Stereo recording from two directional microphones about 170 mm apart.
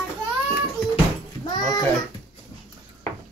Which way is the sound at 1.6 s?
25° left (ahead or behind).